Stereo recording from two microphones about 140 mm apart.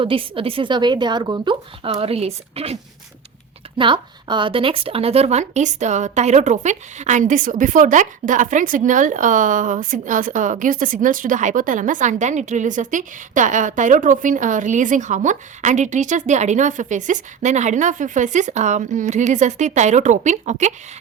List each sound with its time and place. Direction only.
0.0 s a woman's voice: 40° right (ahead or behind)
3.8 s speech: 35° right (ahead or behind); by 20.7 s 55° right (ahead or behind)